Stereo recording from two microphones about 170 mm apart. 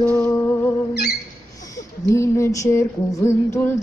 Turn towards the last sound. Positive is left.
turn(degrees=15)  # may be behind; listen again after turning